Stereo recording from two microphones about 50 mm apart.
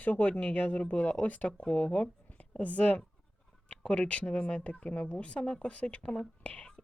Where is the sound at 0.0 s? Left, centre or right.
Left.